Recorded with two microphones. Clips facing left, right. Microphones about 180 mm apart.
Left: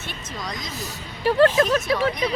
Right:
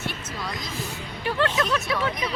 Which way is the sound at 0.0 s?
5° right (ahead or behind).